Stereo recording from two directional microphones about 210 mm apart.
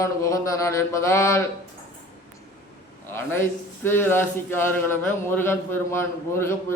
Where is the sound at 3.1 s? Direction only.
10° left (ahead or behind).